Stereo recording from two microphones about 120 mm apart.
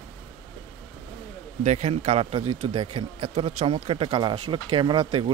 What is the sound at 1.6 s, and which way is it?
A man's voice, 75° right (ahead or behind).